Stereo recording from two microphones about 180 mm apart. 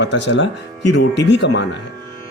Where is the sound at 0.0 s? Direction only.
80° left.